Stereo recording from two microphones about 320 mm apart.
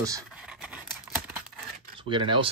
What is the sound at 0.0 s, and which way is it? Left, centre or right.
Computer keyboard, centre.